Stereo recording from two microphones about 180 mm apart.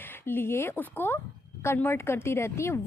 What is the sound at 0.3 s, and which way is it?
A woman's voice, 10° left (ahead or behind).